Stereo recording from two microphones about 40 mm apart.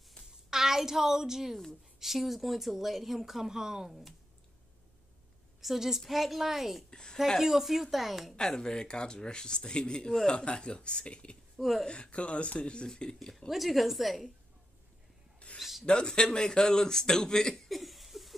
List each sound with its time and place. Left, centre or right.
0.5 s a woman's voice: centre
5.6 s a woman's voice: centre
6.9 s speech: centre
7.4 s speech: centre
8.4 s speech: centre
11.5 s speech: centre
11.9 s speech: left; by 13.4 s centre
13.5 s speech: centre
15.3 s a sound: left
15.8 s a man's voice: left
17.6 s laughter: centre